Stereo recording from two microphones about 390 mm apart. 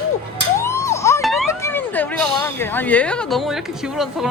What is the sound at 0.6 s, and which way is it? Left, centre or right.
Speech, centre.